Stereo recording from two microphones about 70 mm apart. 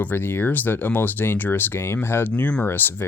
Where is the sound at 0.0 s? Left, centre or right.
Left.